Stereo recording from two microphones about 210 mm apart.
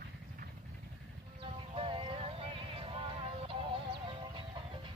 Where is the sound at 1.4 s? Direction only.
25° right (ahead or behind).